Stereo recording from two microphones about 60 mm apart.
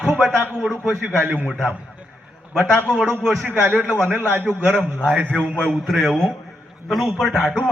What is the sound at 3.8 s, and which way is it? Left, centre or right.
A man's voice, centre.